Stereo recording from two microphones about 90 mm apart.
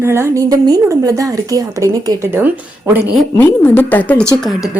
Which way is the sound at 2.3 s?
25° right (ahead or behind).